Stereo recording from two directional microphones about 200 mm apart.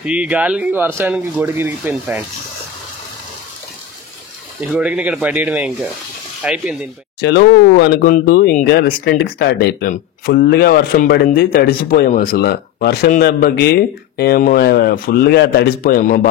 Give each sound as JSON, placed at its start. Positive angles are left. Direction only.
{"t": 0.0, "sound": "speech", "side_deg": -5}
{"t": 4.6, "sound": "speech", "side_deg": -5}
{"t": 7.2, "sound": "speech", "side_deg": 55}